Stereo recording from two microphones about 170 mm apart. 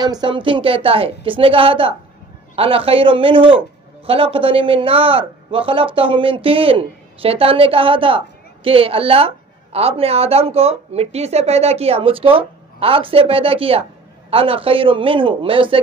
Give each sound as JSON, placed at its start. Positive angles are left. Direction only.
{"t": 0.0, "sound": "a woman's voice", "side_deg": -25}